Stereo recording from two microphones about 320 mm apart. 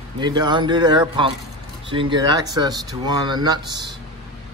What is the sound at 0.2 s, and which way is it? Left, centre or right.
Speech, centre.